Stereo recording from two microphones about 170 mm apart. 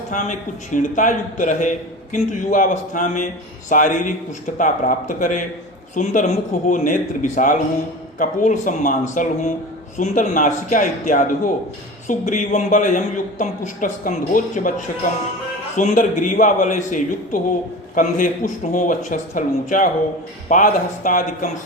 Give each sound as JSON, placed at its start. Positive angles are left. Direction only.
{"t": 0.1, "sound": "speech", "side_deg": 45}
{"t": 15.7, "sound": "speech", "side_deg": 50}